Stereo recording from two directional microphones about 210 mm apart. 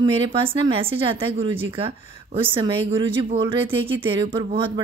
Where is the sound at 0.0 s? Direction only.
25° right (ahead or behind).